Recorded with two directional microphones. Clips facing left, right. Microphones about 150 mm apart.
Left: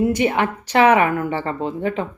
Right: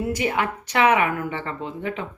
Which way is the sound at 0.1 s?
25° left (ahead or behind).